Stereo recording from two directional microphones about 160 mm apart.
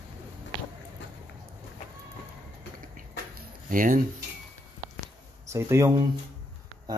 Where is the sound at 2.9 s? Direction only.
60° right (ahead or behind).